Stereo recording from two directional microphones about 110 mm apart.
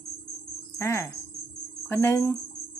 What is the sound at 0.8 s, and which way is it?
A woman's voice, 25° left (ahead or behind).